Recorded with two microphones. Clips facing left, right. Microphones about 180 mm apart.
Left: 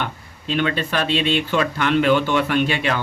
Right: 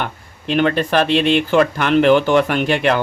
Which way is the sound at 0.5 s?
45° right (ahead or behind).